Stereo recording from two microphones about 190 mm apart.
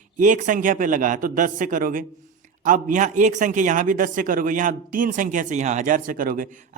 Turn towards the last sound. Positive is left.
turn(degrees=-45)  # may be behind; listen again after turning